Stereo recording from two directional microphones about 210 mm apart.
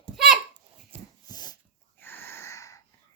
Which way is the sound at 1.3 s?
20° left (ahead or behind).